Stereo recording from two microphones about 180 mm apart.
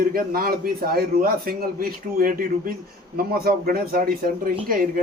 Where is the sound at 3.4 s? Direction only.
55° right (ahead or behind).